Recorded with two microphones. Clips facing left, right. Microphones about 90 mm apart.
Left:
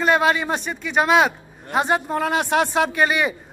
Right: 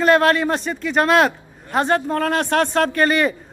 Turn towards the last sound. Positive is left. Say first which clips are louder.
# right 2 dB
turn(degrees=5)  # may be behind; listen again after turning